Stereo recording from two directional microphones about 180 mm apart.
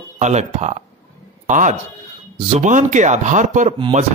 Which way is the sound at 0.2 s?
40° right (ahead or behind).